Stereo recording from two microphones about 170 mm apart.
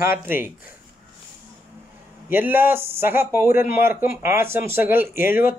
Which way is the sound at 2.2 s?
10° right (ahead or behind).